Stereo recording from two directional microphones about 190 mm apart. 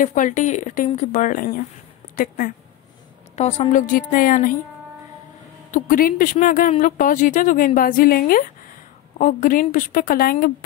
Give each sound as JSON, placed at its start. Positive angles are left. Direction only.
{"t": 0.0, "sound": "speech", "side_deg": 45}
{"t": 3.3, "sound": "speech", "side_deg": 35}
{"t": 5.7, "sound": "speech", "side_deg": 45}